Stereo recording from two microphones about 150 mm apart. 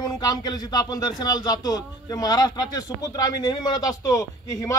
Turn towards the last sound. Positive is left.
turn(degrees=20)  # may be behind; listen again after turning